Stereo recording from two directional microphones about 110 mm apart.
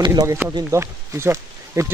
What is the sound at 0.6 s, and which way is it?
Speech, 25° right (ahead or behind).